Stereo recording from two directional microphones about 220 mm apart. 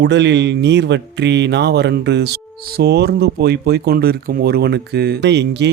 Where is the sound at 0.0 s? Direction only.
50° right (ahead or behind).